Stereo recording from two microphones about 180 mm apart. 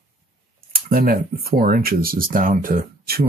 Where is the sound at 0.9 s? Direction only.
55° right (ahead or behind).